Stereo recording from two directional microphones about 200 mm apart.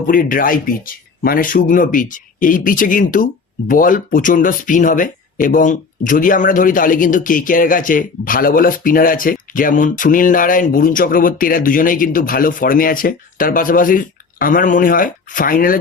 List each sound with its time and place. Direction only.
0.1 s speech: 45° left (ahead or behind)